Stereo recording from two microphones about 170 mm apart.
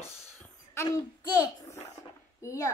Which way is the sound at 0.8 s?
20° left (ahead or behind).